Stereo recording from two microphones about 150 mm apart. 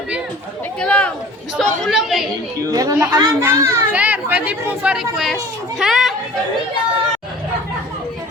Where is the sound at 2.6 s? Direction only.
25° right (ahead or behind); by 6.1 s 5° right (ahead or behind).